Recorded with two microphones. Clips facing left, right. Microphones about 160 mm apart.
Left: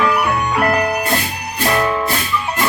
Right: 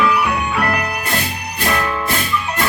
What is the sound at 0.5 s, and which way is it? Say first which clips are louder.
Music: left 5 dB; 30° left (ahead or behind).